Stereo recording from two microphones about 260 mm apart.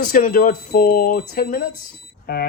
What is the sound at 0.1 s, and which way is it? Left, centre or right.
Speech, left.